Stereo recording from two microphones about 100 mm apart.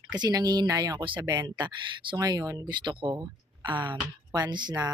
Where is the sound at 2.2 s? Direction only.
40° right (ahead or behind).